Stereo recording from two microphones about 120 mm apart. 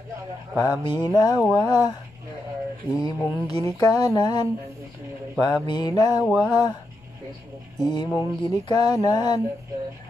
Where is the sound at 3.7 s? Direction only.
35° left (ahead or behind).